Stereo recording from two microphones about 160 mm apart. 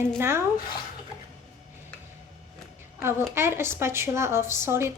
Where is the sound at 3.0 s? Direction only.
15° right (ahead or behind).